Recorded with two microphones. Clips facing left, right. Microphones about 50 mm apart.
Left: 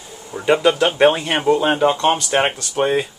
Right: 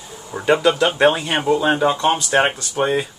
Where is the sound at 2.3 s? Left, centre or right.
Centre.